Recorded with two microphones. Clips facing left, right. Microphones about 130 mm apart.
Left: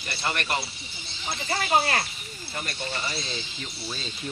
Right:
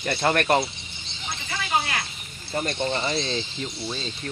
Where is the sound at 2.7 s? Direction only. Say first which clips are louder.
Right 7 dB; 25° right (ahead or behind).